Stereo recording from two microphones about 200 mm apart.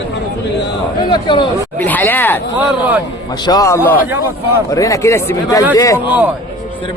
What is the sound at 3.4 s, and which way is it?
Speech, 15° left (ahead or behind).